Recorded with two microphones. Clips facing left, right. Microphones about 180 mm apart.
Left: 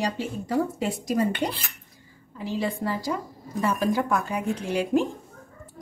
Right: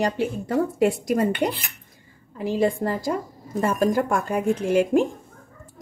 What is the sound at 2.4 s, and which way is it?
A woman's voice, 50° right (ahead or behind).